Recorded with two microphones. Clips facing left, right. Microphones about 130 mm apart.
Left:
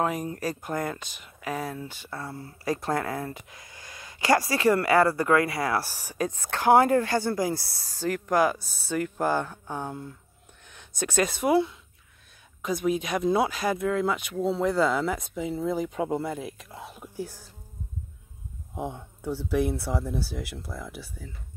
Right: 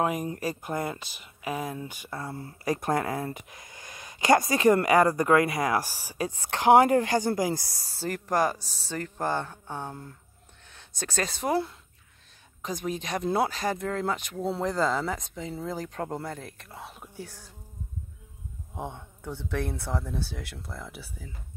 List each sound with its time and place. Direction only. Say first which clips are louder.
0.0 s speech: even; 15° right (ahead or behind)
8.4 s speech: left 2 dB; 5° left (ahead or behind)
12.6 s speech: left 6 dB; 10° left (ahead or behind)
18.8 s speech: left 3 dB; 5° left (ahead or behind)